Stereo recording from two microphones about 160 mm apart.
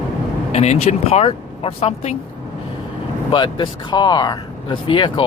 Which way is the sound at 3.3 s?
30° left (ahead or behind).